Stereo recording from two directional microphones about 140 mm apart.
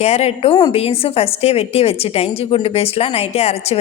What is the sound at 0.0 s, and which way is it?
A woman's voice, 50° left (ahead or behind).